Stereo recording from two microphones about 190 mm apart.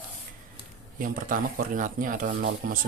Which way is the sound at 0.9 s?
45° right (ahead or behind).